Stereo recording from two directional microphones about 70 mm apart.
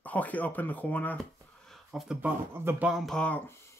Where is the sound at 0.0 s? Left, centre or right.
Left.